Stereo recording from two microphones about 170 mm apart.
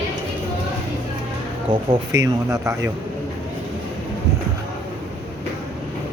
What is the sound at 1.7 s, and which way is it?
Speech, 25° right (ahead or behind).